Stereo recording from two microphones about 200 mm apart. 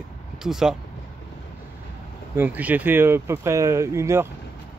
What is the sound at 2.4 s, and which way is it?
Speech, 10° right (ahead or behind).